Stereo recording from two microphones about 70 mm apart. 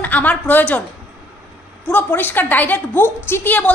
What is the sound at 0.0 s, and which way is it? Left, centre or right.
Speech, left.